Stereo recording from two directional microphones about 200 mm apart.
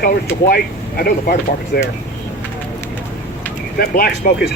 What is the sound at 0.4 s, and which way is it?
Speech, 50° left (ahead or behind).